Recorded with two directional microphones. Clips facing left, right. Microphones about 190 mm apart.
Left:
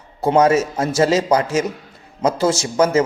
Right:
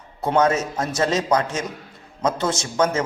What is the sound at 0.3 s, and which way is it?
A man's voice, 30° left (ahead or behind).